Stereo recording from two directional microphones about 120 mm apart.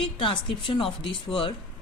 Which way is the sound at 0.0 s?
45° left (ahead or behind).